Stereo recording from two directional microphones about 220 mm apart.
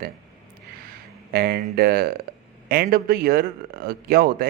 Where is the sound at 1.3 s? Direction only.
45° right (ahead or behind).